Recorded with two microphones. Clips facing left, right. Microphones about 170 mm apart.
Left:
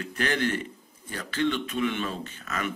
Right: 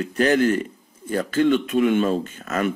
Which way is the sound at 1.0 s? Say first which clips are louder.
Right 9 dB; 45° right (ahead or behind).